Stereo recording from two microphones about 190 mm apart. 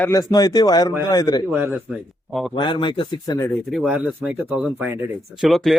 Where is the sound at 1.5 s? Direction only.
10° right (ahead or behind).